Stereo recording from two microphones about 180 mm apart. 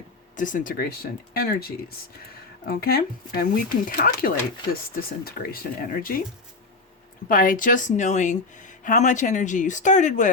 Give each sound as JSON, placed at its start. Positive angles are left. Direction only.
{"t": 0.3, "sound": "speech", "side_deg": 45}
{"t": 7.3, "sound": "speech", "side_deg": 50}